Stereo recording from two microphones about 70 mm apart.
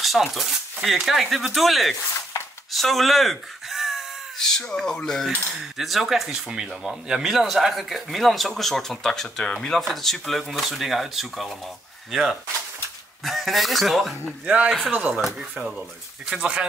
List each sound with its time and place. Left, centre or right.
0.0 s speech: centre
4.4 s speech: centre
5.8 s speech: centre
14.2 s speech: centre